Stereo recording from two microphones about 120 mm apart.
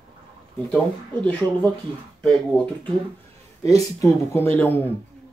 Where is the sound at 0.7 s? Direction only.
10° left (ahead or behind).